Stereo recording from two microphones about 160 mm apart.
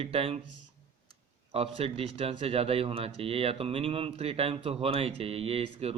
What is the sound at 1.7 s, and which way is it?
Speech, 40° right (ahead or behind).